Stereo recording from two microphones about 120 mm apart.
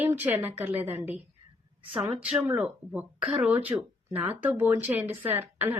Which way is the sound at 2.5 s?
10° right (ahead or behind).